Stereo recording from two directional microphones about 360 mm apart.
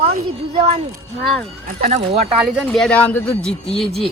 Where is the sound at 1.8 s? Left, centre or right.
Centre.